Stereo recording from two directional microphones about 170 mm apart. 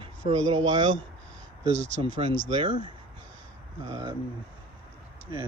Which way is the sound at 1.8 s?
90° right.